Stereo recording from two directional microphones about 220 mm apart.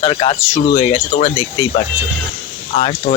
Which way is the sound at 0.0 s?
25° left (ahead or behind).